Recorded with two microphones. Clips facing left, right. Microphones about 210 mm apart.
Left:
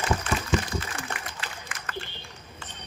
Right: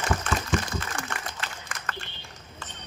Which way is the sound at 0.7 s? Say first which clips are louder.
Even; 50° right (ahead or behind).